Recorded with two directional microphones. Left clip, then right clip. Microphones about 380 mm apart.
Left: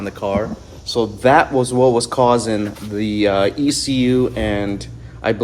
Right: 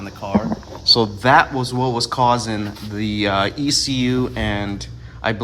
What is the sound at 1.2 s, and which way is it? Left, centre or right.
Speech, centre.